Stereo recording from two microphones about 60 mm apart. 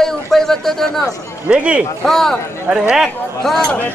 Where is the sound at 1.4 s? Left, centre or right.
Right.